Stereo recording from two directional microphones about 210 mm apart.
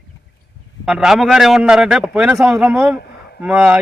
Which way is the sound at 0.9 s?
Centre (ahead or behind).